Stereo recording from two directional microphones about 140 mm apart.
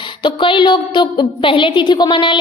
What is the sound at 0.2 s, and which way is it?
A woman's voice, 35° left (ahead or behind).